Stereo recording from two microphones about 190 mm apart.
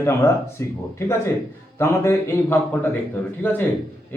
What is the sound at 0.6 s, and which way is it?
A man's voice, 15° left (ahead or behind).